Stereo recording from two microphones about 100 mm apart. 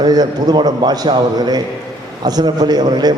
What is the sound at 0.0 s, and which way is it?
A man's voice, 45° right (ahead or behind).